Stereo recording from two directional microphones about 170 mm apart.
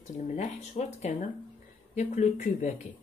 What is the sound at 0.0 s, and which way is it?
Speech, 45° left (ahead or behind).